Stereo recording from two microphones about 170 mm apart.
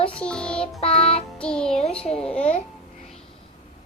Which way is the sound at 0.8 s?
35° left (ahead or behind).